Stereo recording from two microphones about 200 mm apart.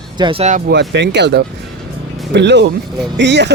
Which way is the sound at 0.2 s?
25° right (ahead or behind).